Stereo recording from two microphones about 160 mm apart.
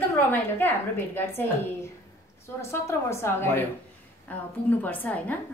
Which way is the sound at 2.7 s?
15° left (ahead or behind).